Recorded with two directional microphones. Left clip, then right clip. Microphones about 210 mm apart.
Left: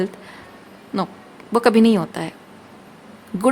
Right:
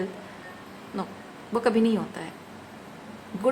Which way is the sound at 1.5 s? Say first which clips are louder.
Left 8 dB; 50° left (ahead or behind).